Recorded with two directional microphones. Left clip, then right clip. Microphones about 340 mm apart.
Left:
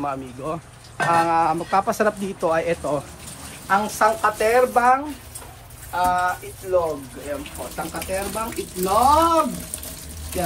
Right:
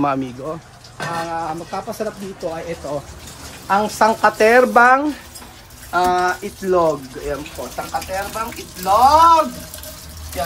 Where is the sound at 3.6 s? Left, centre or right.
Centre.